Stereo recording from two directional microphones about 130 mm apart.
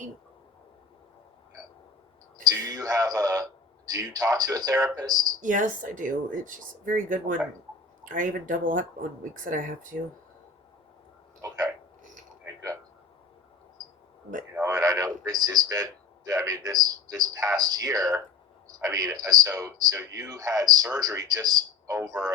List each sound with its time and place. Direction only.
2.4 s a man's voice: 30° right (ahead or behind)
5.4 s speech: 90° right
11.4 s speech: 30° right (ahead or behind)
14.6 s a man's voice: 30° right (ahead or behind)